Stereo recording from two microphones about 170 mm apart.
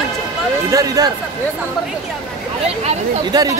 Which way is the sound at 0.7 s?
20° right (ahead or behind).